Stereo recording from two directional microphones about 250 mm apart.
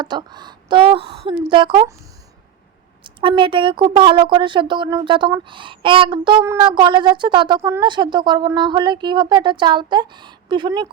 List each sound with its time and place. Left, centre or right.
0.0 s a woman's voice: centre
3.0 s a woman's voice: centre